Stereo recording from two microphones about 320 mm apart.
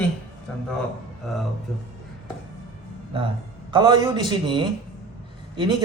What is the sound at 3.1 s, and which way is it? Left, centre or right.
A man's voice, centre.